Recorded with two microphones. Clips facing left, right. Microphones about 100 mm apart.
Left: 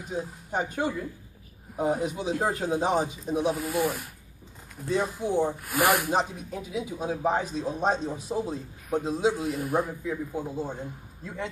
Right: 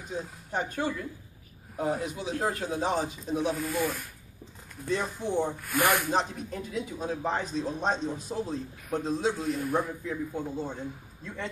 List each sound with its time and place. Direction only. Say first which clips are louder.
0.1 s a man's voice: left 2 dB; 10° left (ahead or behind)